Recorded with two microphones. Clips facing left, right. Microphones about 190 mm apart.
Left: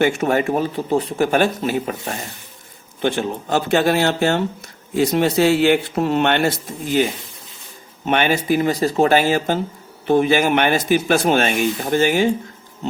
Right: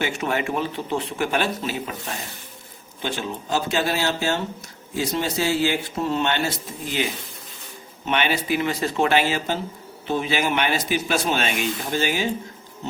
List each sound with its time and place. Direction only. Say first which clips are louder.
0.0 s speech: left 7 dB; 45° left (ahead or behind)
3.0 s a man's voice: left 8 dB; 55° left (ahead or behind)
8.0 s speech: left 5 dB; 45° left (ahead or behind)